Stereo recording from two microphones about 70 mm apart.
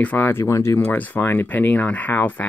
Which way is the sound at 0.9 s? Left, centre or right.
Left.